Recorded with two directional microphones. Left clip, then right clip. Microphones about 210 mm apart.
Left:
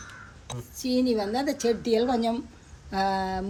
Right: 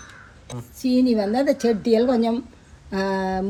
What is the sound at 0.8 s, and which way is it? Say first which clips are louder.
Speech: right 5 dB; 25° right (ahead or behind).